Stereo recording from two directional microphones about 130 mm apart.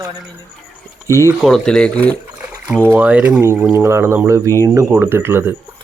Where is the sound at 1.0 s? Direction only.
25° right (ahead or behind).